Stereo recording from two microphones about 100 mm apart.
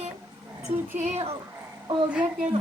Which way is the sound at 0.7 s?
85° right.